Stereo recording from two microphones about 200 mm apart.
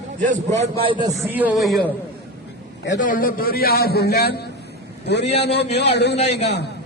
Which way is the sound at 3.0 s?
45° left (ahead or behind).